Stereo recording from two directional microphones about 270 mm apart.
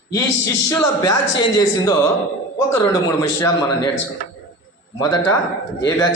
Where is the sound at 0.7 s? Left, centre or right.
Centre.